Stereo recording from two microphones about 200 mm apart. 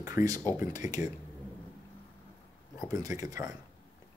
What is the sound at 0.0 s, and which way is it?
Speech, 15° right (ahead or behind).